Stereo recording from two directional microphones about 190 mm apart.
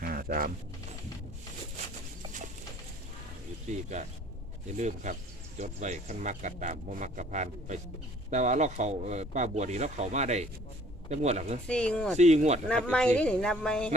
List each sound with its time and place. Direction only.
0.0 s a sound: 50° right (ahead or behind)
3.7 s speech: 40° right (ahead or behind)
11.7 s speech: 5° left (ahead or behind)
12.1 s speech: 35° right (ahead or behind)
12.6 s speech: 5° left (ahead or behind)